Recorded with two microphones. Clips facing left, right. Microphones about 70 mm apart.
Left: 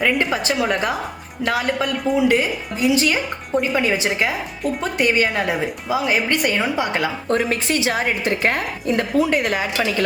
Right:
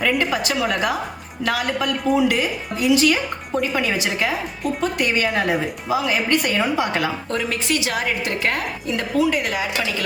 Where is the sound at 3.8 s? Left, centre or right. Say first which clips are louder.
Left 2 dB; left.